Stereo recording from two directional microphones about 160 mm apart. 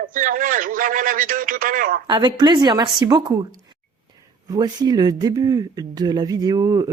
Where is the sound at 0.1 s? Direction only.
55° right (ahead or behind).